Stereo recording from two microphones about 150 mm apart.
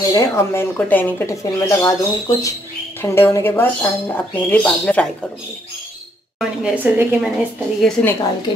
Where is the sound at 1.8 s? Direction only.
20° left (ahead or behind).